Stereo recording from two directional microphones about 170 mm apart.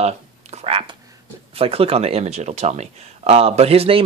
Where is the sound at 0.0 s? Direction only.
40° right (ahead or behind).